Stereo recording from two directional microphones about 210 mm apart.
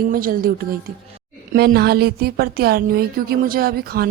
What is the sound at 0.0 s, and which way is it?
A woman's voice, 40° right (ahead or behind).